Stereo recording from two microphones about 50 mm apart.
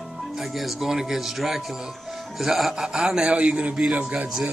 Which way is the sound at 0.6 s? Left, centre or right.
Centre.